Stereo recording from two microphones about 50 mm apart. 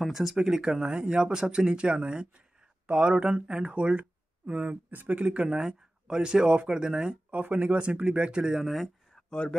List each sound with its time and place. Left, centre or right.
0.0 s speech: centre
7.2 s speech: right; by 8.9 s centre
9.1 s a sound: centre